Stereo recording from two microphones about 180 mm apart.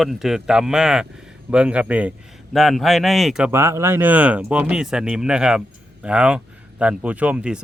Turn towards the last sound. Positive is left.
turn(degrees=-5)  # may be behind; listen again after turning